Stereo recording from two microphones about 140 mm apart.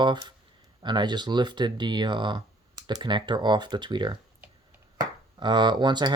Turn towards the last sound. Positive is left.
turn(degrees=-30)  # may be behind; listen again after turning